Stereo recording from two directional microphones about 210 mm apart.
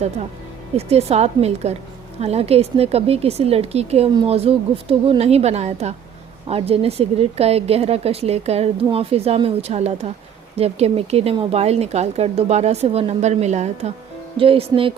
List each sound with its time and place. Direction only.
0.8 s speech: 30° right (ahead or behind)